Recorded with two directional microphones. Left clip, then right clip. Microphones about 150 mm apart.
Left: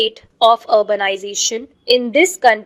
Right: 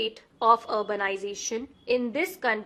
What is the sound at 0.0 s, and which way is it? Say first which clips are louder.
A woman's voice: left 12 dB; 40° left (ahead or behind).